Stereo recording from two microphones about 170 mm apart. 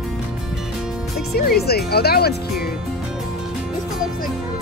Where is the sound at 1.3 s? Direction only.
65° left (ahead or behind).